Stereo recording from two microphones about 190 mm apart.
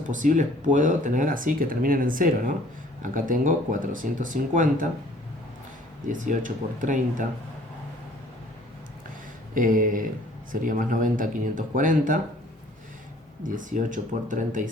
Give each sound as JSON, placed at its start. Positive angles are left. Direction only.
{"t": 0.1, "sound": "speech", "side_deg": -40}
{"t": 6.1, "sound": "speech", "side_deg": -40}
{"t": 9.6, "sound": "speech", "side_deg": -45}
{"t": 13.4, "sound": "speech", "side_deg": -40}